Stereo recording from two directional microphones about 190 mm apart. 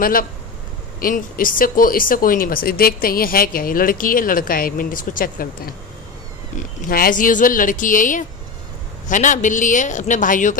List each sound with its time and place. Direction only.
0.0 s speech: 50° left (ahead or behind)
6.9 s a man's voice: 50° left (ahead or behind)